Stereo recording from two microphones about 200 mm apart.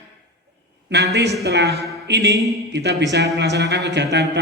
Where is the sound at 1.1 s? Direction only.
60° right (ahead or behind).